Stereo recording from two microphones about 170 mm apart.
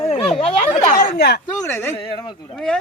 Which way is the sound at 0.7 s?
55° left (ahead or behind).